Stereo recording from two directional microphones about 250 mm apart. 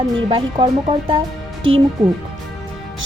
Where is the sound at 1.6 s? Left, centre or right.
Right.